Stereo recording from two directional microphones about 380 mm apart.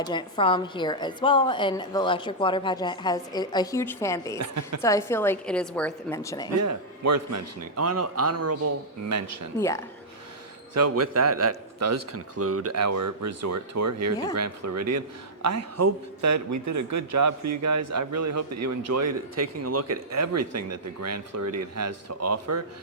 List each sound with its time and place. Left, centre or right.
0.0 s a woman's voice: centre
4.4 s a man's voice: right
4.8 s a woman's voice: centre
6.6 s a man's voice: right
9.6 s a woman's voice: centre
10.8 s a man's voice: right